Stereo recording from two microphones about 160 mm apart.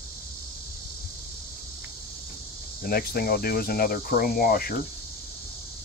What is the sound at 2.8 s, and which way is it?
Speech, 70° left (ahead or behind).